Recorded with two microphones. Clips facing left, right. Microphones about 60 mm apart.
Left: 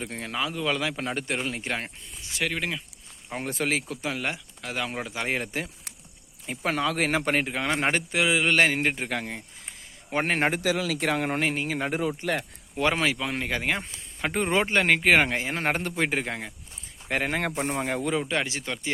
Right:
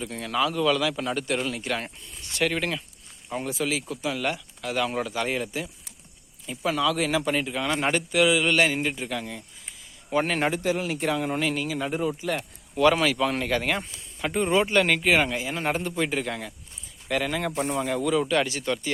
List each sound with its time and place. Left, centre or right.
0.0 s a man's voice: left
0.3 s a man's voice: centre
2.2 s speech: centre
3.5 s a man's voice: left
6.4 s a man's voice: left
10.5 s speech: left
11.3 s a man's voice: left
11.9 s speech: left
12.4 s speech: left
13.1 s speech: centre
13.8 s speech: left
15.1 s a man's voice: left
18.2 s a man's voice: left